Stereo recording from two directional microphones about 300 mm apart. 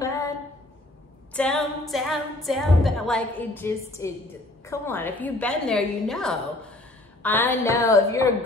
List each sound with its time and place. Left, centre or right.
0.0 s a sound: centre
1.3 s a capella: centre
7.2 s a woman's voice: centre